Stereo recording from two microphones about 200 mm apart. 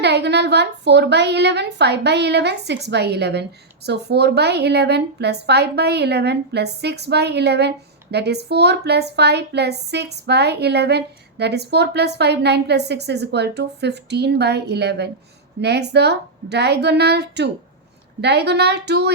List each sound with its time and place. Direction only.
0.0 s a woman's voice: 55° right (ahead or behind)